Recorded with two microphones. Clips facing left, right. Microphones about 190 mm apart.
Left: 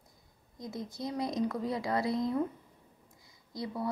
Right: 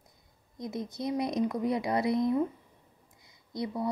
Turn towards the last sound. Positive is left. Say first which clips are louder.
# right 4 dB
turn(degrees=-20)  # may be behind; listen again after turning